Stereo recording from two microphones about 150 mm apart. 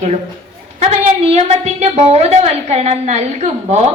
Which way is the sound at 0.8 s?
50° right (ahead or behind).